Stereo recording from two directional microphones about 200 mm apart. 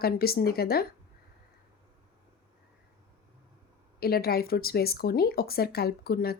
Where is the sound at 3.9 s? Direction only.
50° left (ahead or behind).